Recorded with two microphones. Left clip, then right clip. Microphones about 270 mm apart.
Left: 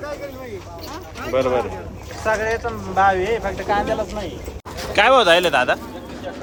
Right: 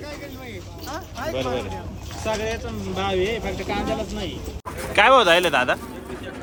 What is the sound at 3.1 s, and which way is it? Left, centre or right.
Speech, centre.